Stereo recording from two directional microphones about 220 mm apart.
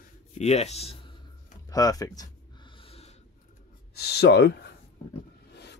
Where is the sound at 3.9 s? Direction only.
45° left (ahead or behind).